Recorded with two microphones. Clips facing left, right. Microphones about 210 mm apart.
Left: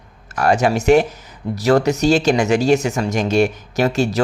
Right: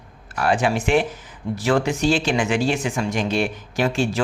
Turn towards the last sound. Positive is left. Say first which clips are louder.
# left 4 dB
turn(degrees=40)  # may be behind; listen again after turning